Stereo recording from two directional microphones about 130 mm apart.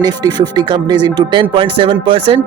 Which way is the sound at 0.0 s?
30° right (ahead or behind).